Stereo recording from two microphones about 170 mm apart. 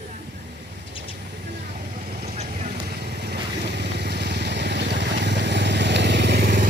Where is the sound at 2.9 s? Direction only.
75° right (ahead or behind).